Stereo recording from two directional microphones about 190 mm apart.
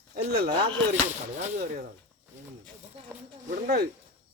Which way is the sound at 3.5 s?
55° right (ahead or behind).